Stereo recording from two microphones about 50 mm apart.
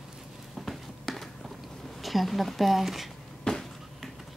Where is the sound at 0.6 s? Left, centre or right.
Centre.